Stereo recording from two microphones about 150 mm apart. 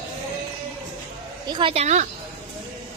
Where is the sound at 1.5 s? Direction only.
35° right (ahead or behind).